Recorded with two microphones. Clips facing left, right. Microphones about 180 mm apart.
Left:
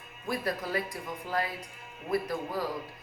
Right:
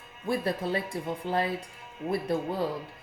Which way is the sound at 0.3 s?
25° right (ahead or behind).